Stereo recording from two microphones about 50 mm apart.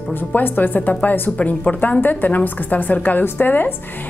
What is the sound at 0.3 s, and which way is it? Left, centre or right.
A woman's voice, left.